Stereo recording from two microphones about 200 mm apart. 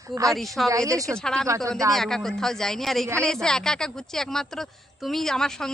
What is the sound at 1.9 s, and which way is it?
A woman's voice, centre (ahead or behind).